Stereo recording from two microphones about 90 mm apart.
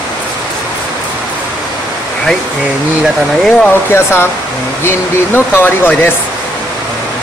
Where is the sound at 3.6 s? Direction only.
25° left (ahead or behind).